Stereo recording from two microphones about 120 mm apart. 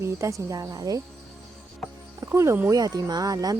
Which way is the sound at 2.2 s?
20° right (ahead or behind).